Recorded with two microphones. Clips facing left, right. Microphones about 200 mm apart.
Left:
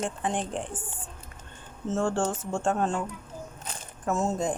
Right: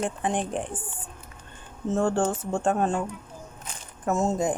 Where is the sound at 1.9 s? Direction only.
15° right (ahead or behind).